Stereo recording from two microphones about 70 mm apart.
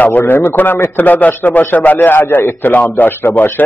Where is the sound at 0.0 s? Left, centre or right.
Left.